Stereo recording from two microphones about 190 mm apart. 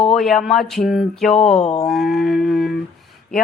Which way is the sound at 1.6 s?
35° left (ahead or behind).